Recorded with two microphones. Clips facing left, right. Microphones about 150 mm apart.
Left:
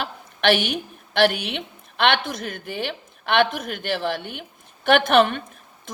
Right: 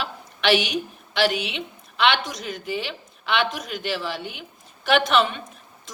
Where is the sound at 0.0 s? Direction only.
50° left (ahead or behind).